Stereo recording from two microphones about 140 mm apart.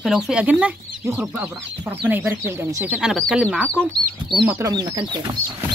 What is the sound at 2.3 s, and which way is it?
Speech, 20° right (ahead or behind).